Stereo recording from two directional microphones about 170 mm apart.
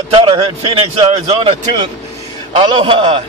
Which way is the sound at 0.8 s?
35° right (ahead or behind).